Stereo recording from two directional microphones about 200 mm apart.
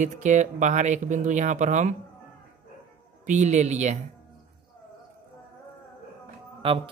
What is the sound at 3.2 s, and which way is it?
Speech, 35° right (ahead or behind).